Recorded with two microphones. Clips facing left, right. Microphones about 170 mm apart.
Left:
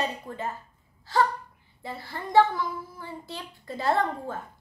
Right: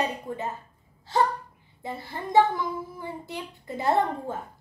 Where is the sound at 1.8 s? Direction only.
20° right (ahead or behind).